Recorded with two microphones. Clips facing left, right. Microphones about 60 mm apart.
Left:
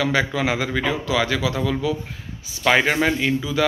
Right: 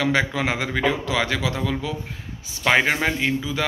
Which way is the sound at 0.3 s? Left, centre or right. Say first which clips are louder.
Left 2 dB; right.